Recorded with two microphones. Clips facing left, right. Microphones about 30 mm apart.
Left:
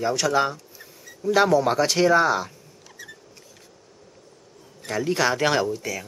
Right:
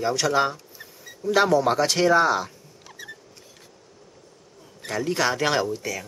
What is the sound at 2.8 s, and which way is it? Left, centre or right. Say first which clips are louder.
Rodents: right 2 dB; centre.